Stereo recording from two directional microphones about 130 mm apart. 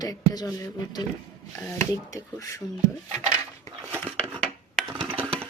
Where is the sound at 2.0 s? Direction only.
25° left (ahead or behind).